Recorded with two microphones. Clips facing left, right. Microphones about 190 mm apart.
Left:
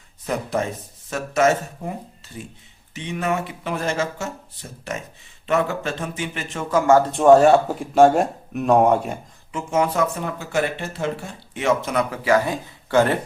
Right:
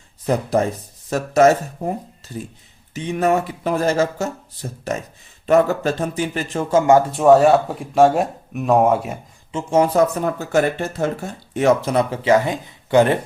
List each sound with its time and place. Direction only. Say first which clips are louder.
0.3 s speech: right 5 dB; 35° right (ahead or behind); by 7.1 s 15° right (ahead or behind)
7.1 s speech: left 2 dB; centre (ahead or behind)
9.5 s speech: right 4 dB; 30° right (ahead or behind)